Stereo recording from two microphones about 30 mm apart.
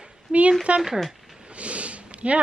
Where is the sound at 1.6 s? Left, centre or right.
Right.